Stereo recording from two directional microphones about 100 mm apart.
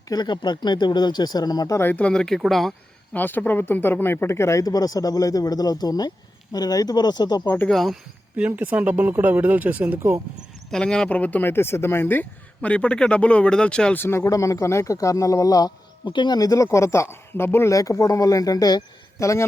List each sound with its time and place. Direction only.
0.1 s speech: 45° left (ahead or behind)
1.8 s speech: 15° left (ahead or behind)
3.1 s speech: 20° left (ahead or behind); by 7.4 s 45° left (ahead or behind)
7.4 s speech: 20° left (ahead or behind)
7.7 s speech: centre (ahead or behind)
8.4 s speech: 15° right (ahead or behind)
10.7 s speech: 10° left (ahead or behind)
14.0 s speech: 25° left (ahead or behind)
16.0 s speech: 50° left (ahead or behind)
16.6 s speech: 30° left (ahead or behind)